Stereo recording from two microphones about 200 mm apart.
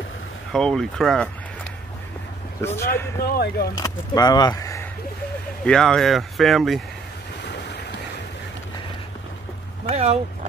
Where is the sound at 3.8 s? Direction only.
20° left (ahead or behind).